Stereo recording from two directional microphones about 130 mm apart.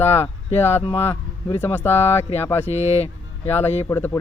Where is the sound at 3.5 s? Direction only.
15° left (ahead or behind).